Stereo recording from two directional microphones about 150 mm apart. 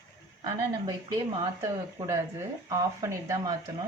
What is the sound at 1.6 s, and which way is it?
Speech, 20° right (ahead or behind).